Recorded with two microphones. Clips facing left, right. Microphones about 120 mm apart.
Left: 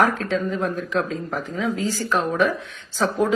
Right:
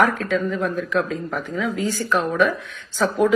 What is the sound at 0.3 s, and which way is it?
A woman's voice, 30° left (ahead or behind).